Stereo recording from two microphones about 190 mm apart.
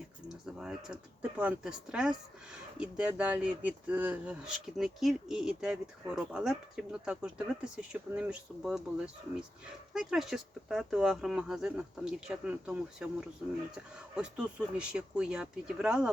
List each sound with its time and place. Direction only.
0.6 s speech: 5° right (ahead or behind)
9.9 s speech: centre (ahead or behind)